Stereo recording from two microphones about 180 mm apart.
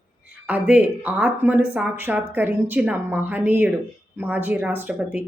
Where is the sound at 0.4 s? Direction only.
10° right (ahead or behind).